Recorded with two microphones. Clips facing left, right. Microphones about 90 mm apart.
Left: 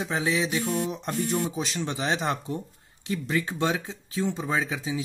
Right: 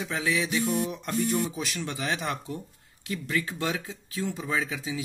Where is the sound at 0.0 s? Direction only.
25° left (ahead or behind).